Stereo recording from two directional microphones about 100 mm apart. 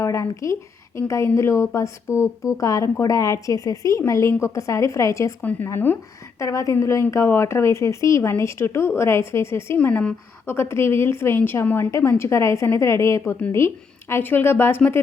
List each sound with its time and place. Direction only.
0.0 s speech: 30° left (ahead or behind)
5.4 s a woman's voice: 15° left (ahead or behind)
9.7 s a woman's voice: 15° left (ahead or behind)
10.5 s a woman's voice: 25° left (ahead or behind)